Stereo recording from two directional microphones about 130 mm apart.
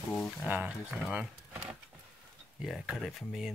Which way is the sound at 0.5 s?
15° right (ahead or behind).